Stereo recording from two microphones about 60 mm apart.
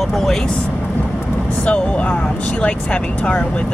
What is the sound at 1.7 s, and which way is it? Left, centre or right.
Speech, centre.